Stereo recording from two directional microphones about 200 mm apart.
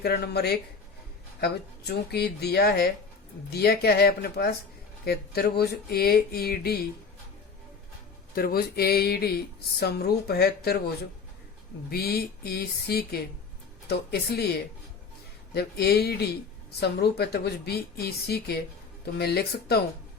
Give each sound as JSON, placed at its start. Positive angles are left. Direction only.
{"t": 0.0, "sound": "speech", "side_deg": 55}
{"t": 8.4, "sound": "speech", "side_deg": 50}
{"t": 15.5, "sound": "speech", "side_deg": 50}